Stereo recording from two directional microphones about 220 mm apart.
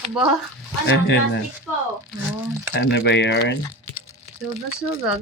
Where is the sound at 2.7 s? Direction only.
55° left (ahead or behind).